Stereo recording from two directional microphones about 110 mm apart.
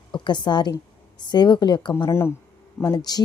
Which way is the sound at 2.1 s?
25° left (ahead or behind).